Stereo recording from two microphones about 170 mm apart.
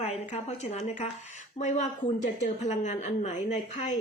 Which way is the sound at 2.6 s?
45° left (ahead or behind).